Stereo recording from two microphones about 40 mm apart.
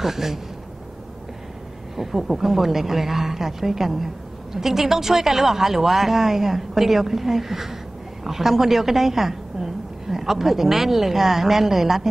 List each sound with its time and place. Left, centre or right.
0.0 s a woman's voice: centre
2.0 s a woman's voice: centre